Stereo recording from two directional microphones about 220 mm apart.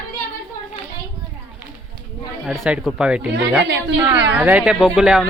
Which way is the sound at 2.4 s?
5° right (ahead or behind).